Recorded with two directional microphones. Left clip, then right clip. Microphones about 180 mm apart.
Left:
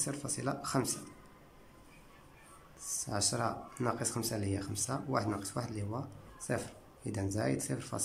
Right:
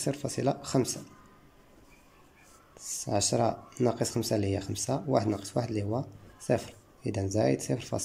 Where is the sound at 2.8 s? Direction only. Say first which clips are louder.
Right 6 dB; 20° right (ahead or behind).